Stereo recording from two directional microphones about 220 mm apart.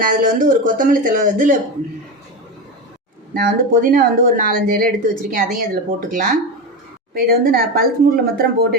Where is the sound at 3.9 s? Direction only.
40° right (ahead or behind).